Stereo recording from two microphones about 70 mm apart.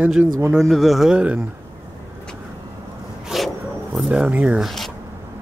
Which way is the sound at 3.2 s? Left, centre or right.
Centre.